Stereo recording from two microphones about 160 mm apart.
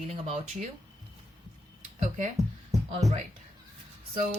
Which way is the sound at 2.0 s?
50° right (ahead or behind).